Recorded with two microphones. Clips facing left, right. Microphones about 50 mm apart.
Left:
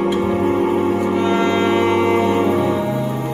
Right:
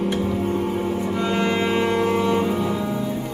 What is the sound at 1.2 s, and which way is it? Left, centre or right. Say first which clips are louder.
Music: left 3 dB; left.